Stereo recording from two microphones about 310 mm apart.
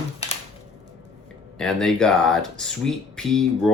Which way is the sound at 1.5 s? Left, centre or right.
Centre.